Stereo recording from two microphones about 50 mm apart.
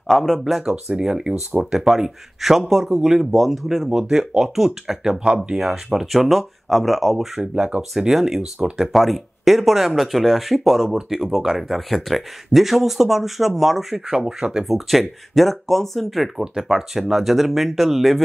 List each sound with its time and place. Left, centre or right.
0.1 s speech: centre
5.1 s speech: centre
7.5 s speech: centre
8.0 s speech: centre